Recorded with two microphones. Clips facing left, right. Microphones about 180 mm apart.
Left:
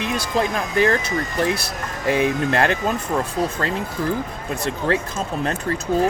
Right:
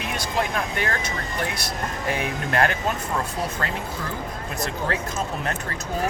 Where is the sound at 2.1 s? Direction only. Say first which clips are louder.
Left 6 dB; 25° left (ahead or behind).